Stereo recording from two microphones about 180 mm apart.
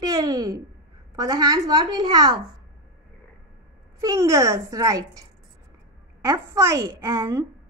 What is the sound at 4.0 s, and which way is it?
A child's voice, 15° right (ahead or behind).